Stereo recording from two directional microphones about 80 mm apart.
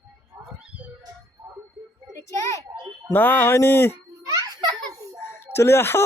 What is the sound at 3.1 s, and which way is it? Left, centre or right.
Speech, left.